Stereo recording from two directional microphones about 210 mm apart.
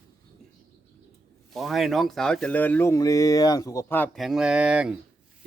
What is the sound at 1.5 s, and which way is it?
Speech, centre (ahead or behind).